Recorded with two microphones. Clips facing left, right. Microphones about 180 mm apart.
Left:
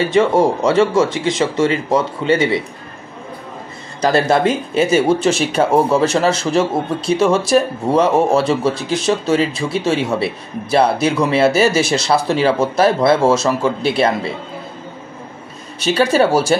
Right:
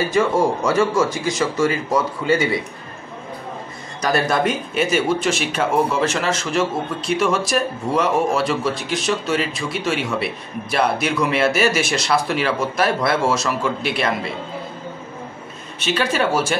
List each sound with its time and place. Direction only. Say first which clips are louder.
0.1 s speech: left 5 dB; 25° left (ahead or behind)
4.0 s speech: left 5 dB; 30° left (ahead or behind)
15.8 s speech: left 6 dB; 35° left (ahead or behind)